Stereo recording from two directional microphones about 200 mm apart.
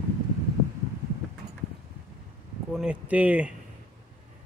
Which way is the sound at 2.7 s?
5° right (ahead or behind).